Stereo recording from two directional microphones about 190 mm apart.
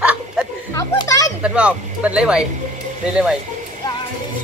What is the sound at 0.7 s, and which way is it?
Children playing, 15° left (ahead or behind).